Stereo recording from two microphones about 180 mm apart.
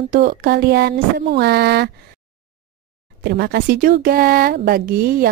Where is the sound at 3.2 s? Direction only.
65° right (ahead or behind).